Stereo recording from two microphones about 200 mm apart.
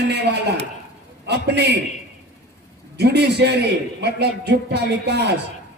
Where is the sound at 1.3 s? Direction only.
55° right (ahead or behind).